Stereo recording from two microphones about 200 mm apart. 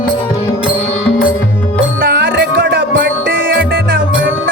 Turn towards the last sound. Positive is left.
turn(degrees=-45)  # may be behind; listen again after turning